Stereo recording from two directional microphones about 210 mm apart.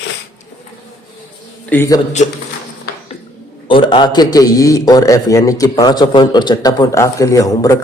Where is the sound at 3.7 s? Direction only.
25° left (ahead or behind).